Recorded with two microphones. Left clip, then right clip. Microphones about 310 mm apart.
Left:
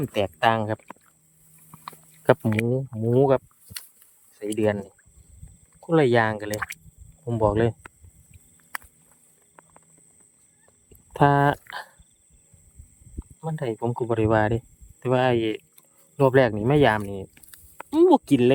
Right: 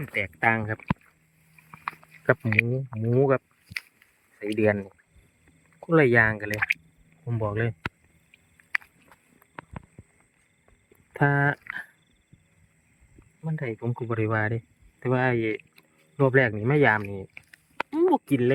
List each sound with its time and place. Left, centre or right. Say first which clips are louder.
0.5 s speech: left 2 dB; centre
5.9 s speech: even; centre
8.5 s a sound: right 7 dB; centre
11.1 s speech: left 5 dB; centre
13.4 s speech: left 5 dB; centre